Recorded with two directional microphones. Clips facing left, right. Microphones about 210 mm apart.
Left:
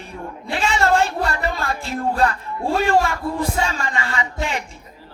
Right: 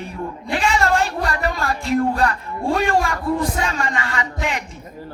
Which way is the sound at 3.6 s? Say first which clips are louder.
Right 1 dB; 30° left (ahead or behind).